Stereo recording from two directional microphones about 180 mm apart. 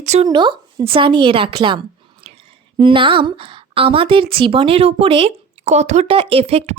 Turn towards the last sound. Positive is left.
turn(degrees=-35)  # may be behind; listen again after turning